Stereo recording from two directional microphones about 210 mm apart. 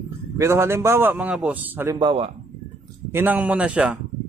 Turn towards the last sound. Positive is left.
turn(degrees=-5)  # may be behind; listen again after turning